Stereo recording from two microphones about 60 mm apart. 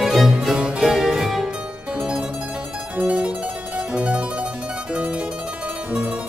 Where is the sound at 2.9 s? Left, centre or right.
Right.